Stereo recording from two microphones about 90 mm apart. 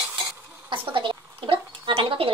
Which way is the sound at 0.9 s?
70° right (ahead or behind).